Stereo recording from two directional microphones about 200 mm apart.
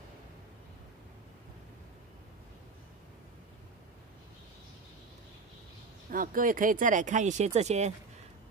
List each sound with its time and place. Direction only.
6.0 s speech: 45° right (ahead or behind)